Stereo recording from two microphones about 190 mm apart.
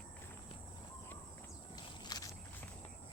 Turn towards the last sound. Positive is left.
turn(degrees=20)  # may be behind; listen again after turning